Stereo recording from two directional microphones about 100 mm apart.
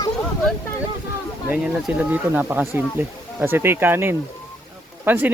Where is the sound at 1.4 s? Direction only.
10° right (ahead or behind).